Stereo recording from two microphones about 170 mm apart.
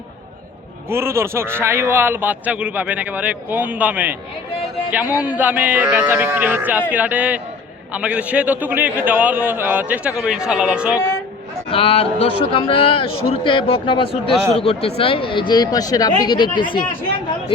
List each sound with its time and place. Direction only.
0.9 s a man's voice: 15° right (ahead or behind)
11.7 s a man's voice: 35° left (ahead or behind)